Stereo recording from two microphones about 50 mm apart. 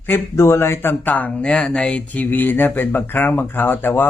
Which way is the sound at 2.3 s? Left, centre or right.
Left.